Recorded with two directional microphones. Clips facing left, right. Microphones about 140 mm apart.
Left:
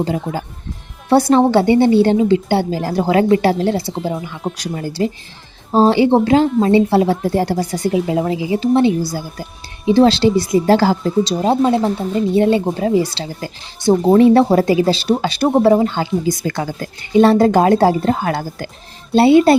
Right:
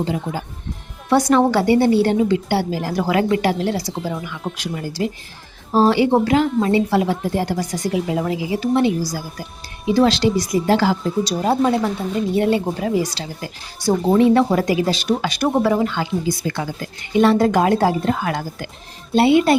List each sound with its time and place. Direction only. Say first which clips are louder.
0.0 s speech: left 3 dB; 40° left (ahead or behind)
1.1 s speech: left 3 dB; 30° left (ahead or behind)
4.5 s speech: left 2 dB; 40° left (ahead or behind)
5.7 s speech: left 3 dB; 25° left (ahead or behind)
11.3 s speech: left 1 dB; 20° left (ahead or behind)
16.3 s speech: left 3 dB; 40° left (ahead or behind)